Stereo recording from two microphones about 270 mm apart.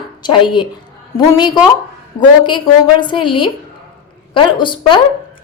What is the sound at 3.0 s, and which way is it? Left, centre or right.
A woman's voice, centre.